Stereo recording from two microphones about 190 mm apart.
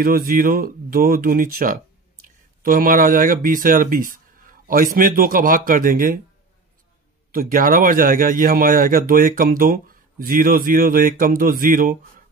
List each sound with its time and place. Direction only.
0.3 s speech: 50° right (ahead or behind)
7.3 s speech: 50° right (ahead or behind)